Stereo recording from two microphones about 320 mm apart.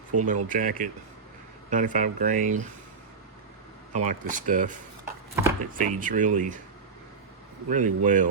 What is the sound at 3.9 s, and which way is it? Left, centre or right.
Speech, right.